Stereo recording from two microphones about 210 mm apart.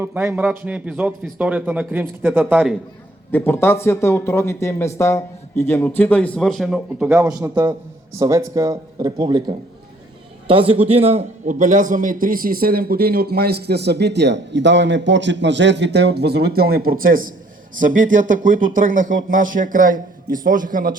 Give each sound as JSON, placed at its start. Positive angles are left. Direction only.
{"t": 0.0, "sound": "a man's voice", "side_deg": -10}
{"t": 3.3, "sound": "a man's voice", "side_deg": 10}